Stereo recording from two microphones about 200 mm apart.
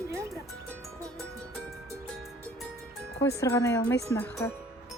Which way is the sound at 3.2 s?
15° left (ahead or behind).